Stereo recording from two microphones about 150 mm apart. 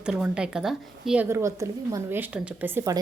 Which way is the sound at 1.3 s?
20° right (ahead or behind).